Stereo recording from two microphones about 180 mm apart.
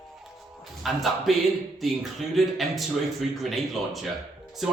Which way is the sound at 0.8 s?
Centre (ahead or behind).